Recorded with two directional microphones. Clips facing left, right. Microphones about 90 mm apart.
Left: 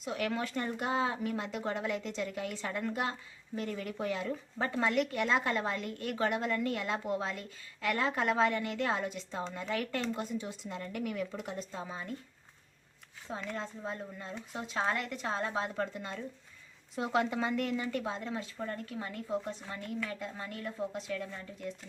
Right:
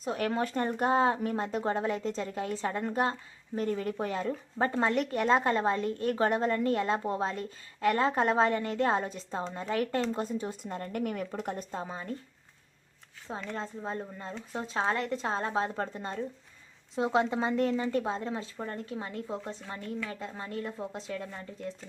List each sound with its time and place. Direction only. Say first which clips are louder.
0.0 s speech: right 4 dB; 35° right (ahead or behind)
13.2 s a woman's voice: right 2 dB; 30° right (ahead or behind)